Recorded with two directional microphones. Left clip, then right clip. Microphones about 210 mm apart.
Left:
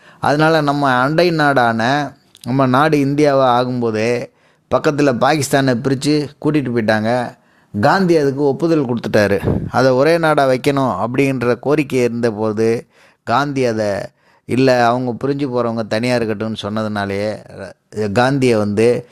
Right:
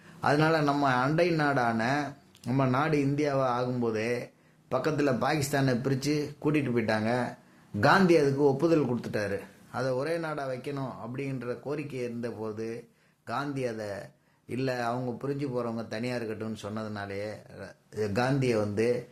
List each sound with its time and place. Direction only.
0.2 s a man's voice: 45° left (ahead or behind)